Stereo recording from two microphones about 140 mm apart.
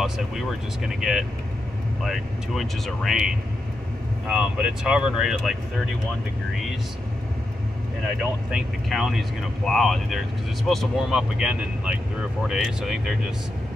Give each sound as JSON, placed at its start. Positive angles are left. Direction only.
{"t": 0.0, "sound": "speech", "side_deg": 0}
{"t": 4.3, "sound": "speech", "side_deg": -5}
{"t": 8.2, "sound": "speech", "side_deg": 0}